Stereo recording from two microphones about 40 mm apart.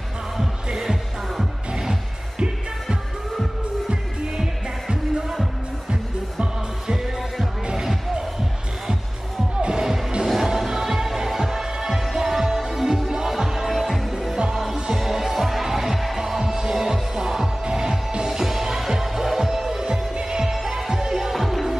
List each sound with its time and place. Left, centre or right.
0.4 s music: centre
3.9 s music: centre
6.4 s music: right
9.8 s music: centre
14.1 s music: centre